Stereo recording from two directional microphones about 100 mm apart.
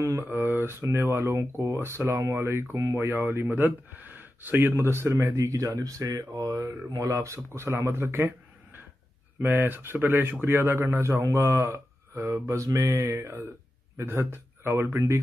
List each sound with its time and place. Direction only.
0.0 s speech: 25° right (ahead or behind)
3.2 s speech: 20° right (ahead or behind)
9.4 s speech: 20° right (ahead or behind)